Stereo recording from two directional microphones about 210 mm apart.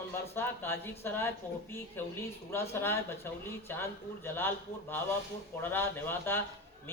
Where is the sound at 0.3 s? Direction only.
10° left (ahead or behind).